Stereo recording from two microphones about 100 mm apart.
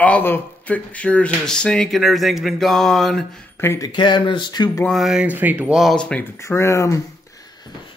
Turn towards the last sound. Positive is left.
turn(degrees=30)  # may be behind; listen again after turning